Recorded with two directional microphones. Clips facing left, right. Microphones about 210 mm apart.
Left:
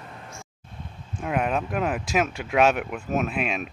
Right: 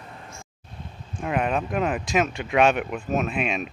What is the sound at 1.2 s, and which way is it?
Speech, centre (ahead or behind).